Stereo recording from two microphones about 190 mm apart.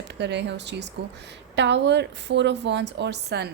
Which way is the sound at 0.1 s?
65° right (ahead or behind).